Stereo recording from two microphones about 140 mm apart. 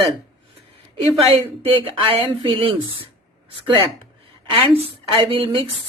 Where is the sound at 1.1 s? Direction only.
40° right (ahead or behind).